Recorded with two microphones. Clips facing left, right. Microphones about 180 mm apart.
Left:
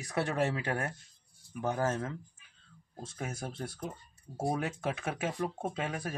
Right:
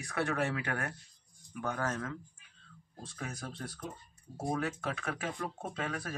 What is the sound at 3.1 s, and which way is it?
Speech, 25° left (ahead or behind).